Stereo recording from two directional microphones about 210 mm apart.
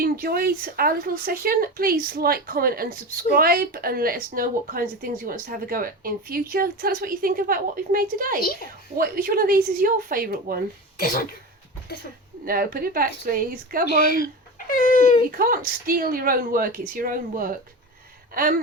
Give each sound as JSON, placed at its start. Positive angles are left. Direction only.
{"t": 0.0, "sound": "speech", "side_deg": -45}
{"t": 10.9, "sound": "speech", "side_deg": 40}
{"t": 12.5, "sound": "speech", "side_deg": -45}
{"t": 14.7, "sound": "speech", "side_deg": 40}
{"t": 15.4, "sound": "speech", "side_deg": -45}